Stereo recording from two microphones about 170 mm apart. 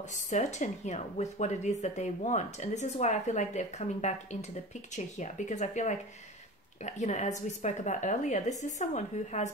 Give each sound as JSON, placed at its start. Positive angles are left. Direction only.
{"t": 0.1, "sound": "speech", "side_deg": 45}